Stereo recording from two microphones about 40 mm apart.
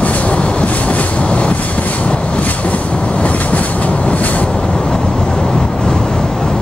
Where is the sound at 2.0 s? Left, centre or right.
Left.